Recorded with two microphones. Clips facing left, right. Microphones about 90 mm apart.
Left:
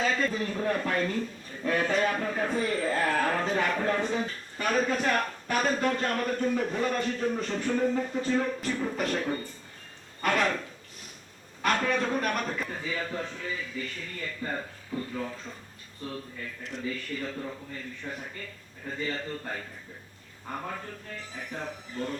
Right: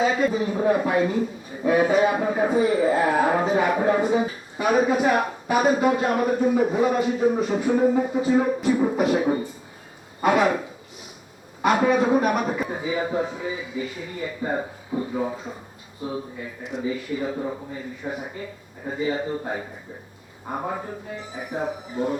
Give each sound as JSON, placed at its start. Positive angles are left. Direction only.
{"t": 0.0, "sound": "a man's voice", "side_deg": -10}